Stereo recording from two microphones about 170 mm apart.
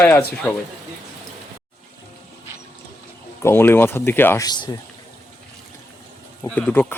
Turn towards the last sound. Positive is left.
turn(degrees=5)  # may be behind; listen again after turning